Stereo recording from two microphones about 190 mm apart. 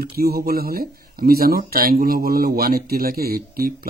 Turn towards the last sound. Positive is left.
turn(degrees=-50)  # may be behind; listen again after turning